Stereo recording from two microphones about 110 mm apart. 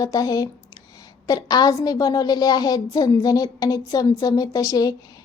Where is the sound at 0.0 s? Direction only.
35° left (ahead or behind).